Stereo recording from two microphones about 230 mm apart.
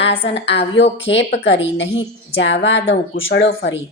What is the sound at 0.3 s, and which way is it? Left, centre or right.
A woman's voice, left.